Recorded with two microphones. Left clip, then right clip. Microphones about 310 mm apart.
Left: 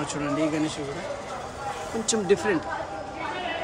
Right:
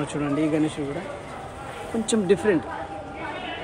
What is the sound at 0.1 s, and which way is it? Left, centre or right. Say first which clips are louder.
Speech: right 2 dB; centre.